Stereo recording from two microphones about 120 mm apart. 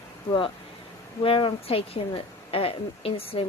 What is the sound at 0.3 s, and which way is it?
A woman's voice, 45° left (ahead or behind).